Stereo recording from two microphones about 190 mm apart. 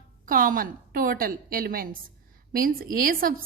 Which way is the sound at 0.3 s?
45° right (ahead or behind).